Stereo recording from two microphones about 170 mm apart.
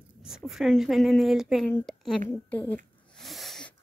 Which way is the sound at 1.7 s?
5° left (ahead or behind).